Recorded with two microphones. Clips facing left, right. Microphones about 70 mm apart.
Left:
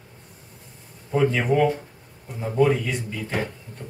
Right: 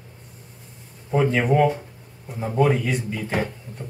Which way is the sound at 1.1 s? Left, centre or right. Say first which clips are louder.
Right 1 dB; centre.